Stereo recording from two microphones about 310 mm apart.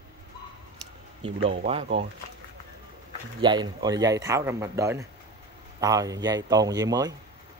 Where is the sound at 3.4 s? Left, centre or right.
Centre.